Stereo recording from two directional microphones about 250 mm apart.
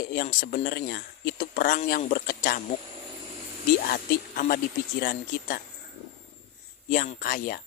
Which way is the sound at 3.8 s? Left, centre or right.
Left.